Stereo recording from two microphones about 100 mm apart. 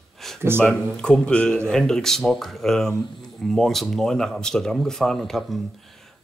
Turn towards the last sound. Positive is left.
turn(degrees=5)  # may be behind; listen again after turning